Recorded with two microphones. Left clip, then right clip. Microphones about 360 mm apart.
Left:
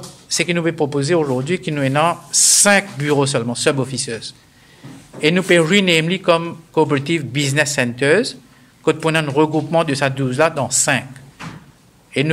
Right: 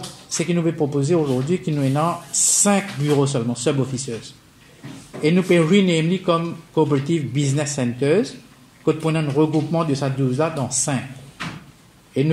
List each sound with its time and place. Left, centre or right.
0.4 s a man's voice: left
12.1 s a man's voice: left